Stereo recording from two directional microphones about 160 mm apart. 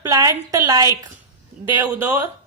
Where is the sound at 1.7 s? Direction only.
10° right (ahead or behind).